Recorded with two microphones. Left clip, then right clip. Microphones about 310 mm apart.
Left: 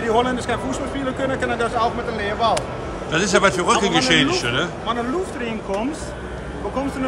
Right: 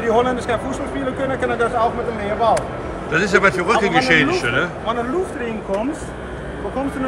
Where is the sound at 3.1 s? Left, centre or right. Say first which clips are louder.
Right 2 dB; centre.